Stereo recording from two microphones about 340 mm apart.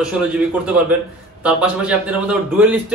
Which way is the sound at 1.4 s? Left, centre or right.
Centre.